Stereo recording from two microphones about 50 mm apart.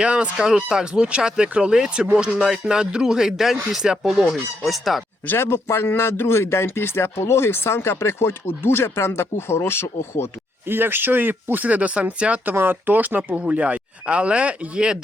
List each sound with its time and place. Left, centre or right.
0.0 s speech: right
0.3 s speech: centre
4.6 s fowl: centre
5.6 s speech: left
10.7 s speech: right
12.5 s speech: right